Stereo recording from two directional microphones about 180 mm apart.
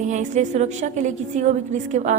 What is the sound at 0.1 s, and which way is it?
A woman's voice, 40° right (ahead or behind).